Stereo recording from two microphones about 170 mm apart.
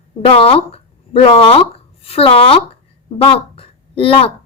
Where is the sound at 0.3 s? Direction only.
35° left (ahead or behind).